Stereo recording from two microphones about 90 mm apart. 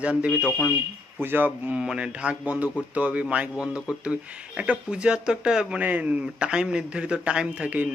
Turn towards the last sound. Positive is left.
turn(degrees=-15)  # may be behind; listen again after turning